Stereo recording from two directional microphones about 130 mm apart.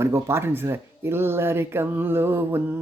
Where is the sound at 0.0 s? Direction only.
20° right (ahead or behind).